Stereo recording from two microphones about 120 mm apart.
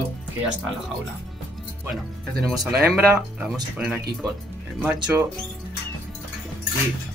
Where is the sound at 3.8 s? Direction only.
10° right (ahead or behind).